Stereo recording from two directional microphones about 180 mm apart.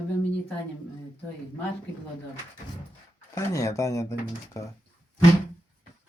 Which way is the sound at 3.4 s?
15° left (ahead or behind).